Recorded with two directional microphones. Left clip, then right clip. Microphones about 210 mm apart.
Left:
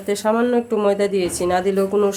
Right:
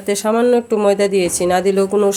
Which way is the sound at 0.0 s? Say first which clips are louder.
Right 3 dB; 30° right (ahead or behind).